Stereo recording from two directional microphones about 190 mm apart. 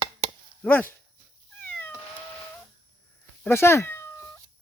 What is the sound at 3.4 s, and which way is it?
Speech, 15° left (ahead or behind).